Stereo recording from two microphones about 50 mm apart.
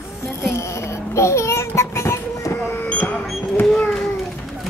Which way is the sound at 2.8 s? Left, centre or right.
Left.